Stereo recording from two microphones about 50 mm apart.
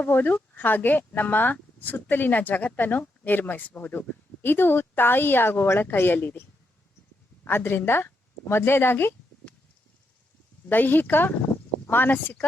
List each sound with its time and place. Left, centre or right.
0.0 s a woman's voice: left
7.4 s a woman's voice: left
10.7 s speech: left